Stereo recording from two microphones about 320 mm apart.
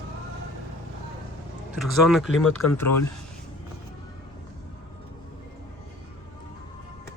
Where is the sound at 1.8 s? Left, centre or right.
Centre.